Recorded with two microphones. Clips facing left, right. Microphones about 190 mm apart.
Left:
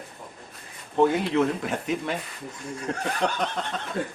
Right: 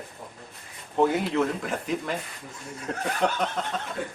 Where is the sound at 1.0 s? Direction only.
Centre (ahead or behind).